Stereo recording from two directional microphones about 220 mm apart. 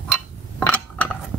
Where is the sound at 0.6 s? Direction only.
5° left (ahead or behind).